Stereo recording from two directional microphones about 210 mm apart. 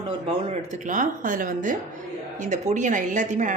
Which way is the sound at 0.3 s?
30° right (ahead or behind).